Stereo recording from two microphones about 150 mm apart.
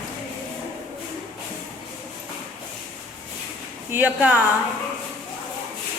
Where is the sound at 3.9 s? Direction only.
10° right (ahead or behind).